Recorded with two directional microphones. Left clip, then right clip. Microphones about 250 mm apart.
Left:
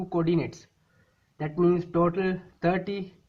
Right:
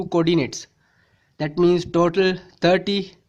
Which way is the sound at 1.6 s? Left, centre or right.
Right.